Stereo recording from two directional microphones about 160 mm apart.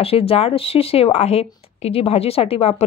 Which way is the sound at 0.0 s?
35° left (ahead or behind).